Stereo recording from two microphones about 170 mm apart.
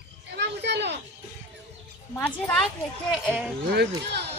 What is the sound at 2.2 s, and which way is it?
Speech, 5° left (ahead or behind).